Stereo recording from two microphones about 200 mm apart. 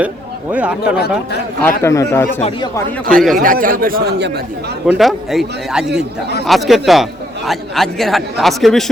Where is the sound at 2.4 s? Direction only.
25° left (ahead or behind).